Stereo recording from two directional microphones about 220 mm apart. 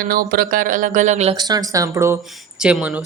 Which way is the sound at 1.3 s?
15° right (ahead or behind).